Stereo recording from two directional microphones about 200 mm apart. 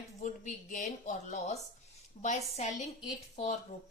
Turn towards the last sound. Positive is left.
turn(degrees=35)  # may be behind; listen again after turning